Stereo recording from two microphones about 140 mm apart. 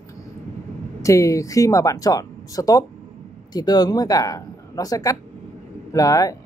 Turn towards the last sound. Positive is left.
turn(degrees=25)  # may be behind; listen again after turning